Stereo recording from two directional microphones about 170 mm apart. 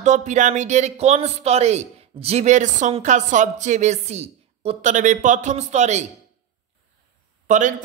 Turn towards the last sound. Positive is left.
turn(degrees=-50)  # may be behind; listen again after turning